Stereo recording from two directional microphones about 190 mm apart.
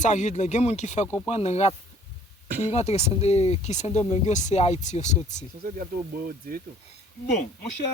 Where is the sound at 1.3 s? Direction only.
35° left (ahead or behind).